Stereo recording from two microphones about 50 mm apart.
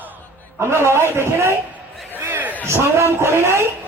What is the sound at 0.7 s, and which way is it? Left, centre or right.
A man's voice, right.